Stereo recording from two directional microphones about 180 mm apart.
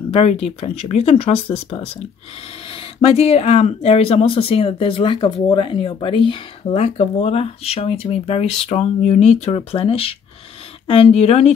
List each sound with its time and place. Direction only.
0.1 s speech: 35° left (ahead or behind)